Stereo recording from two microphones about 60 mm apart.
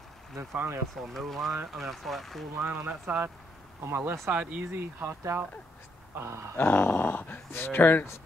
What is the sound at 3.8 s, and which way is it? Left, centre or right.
Grunt, right.